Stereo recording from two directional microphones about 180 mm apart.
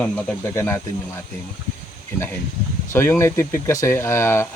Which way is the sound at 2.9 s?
15° left (ahead or behind).